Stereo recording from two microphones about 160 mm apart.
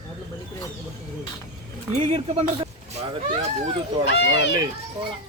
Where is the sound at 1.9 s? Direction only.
45° right (ahead or behind).